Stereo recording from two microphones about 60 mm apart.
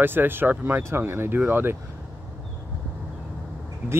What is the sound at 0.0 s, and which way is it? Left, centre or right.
Speech, right.